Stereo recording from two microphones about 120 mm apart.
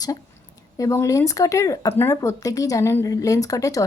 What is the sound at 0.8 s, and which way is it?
Speech, 25° left (ahead or behind).